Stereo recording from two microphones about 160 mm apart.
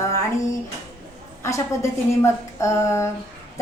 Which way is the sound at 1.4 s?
15° left (ahead or behind).